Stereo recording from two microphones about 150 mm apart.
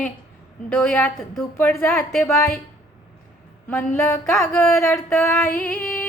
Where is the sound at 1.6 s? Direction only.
15° left (ahead or behind).